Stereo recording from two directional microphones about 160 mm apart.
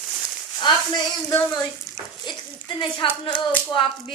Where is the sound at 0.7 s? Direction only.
30° left (ahead or behind).